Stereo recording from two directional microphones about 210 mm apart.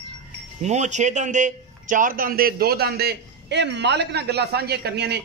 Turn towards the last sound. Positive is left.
turn(degrees=-50)  # may be behind; listen again after turning